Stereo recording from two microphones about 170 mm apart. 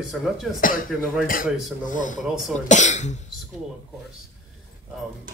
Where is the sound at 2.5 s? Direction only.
45° left (ahead or behind).